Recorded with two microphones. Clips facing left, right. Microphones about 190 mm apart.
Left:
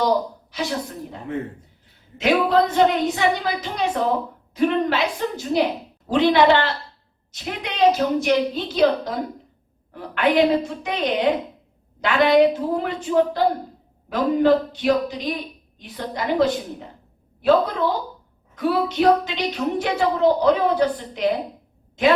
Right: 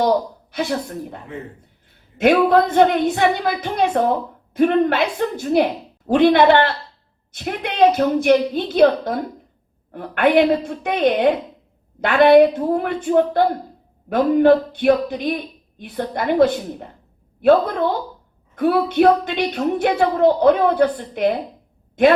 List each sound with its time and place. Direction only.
0.5 s a woman's voice: 55° right (ahead or behind)
2.1 s a woman's voice: 55° right (ahead or behind)
18.5 s a woman's voice: 55° right (ahead or behind)